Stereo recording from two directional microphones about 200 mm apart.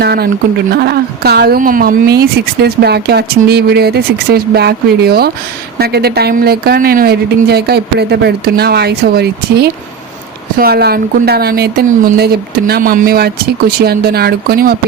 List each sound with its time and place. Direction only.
0.0 s a woman's voice: 50° right (ahead or behind)